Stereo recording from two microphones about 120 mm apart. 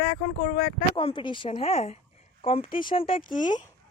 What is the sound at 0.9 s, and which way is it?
A woman's voice, 45° left (ahead or behind).